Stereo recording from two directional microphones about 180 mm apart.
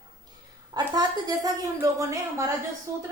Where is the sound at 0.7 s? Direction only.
20° right (ahead or behind).